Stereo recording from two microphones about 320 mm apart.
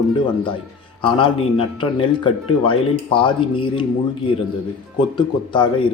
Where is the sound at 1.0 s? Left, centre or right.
Centre.